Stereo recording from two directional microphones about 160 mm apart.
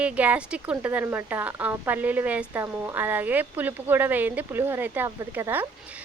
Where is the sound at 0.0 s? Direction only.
10° right (ahead or behind).